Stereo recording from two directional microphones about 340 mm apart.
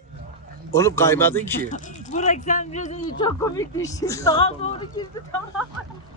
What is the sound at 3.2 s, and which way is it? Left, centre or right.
Speech, centre.